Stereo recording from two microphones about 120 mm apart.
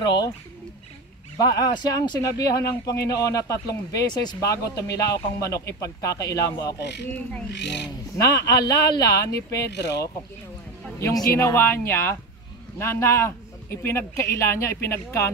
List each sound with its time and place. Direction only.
0.0 s speech: 35° left (ahead or behind)
1.4 s a man's voice: 35° left (ahead or behind)
8.2 s a man's voice: 30° left (ahead or behind)